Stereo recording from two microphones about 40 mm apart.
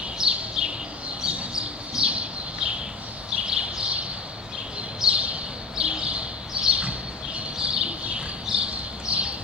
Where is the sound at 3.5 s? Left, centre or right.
Right.